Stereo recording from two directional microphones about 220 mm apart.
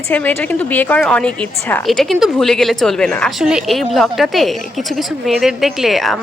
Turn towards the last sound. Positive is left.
turn(degrees=0)  # may be behind; listen again after turning